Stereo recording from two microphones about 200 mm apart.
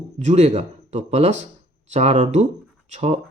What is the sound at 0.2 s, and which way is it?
Speech, 35° right (ahead or behind).